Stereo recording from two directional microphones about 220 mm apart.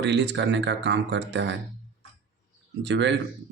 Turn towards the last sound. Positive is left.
turn(degrees=-55)  # may be behind; listen again after turning